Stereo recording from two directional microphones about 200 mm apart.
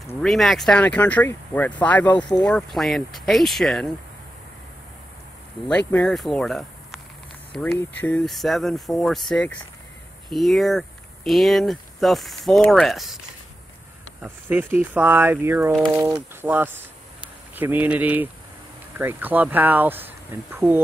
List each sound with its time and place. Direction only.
0.2 s speech: centre (ahead or behind)
5.7 s speech: 5° left (ahead or behind)
14.2 s speech: 10° right (ahead or behind)